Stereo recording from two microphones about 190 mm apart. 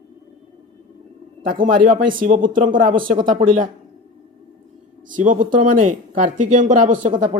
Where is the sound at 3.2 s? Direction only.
25° right (ahead or behind).